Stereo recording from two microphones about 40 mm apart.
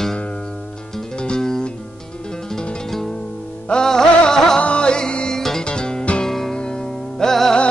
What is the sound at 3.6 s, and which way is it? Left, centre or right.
Music, centre.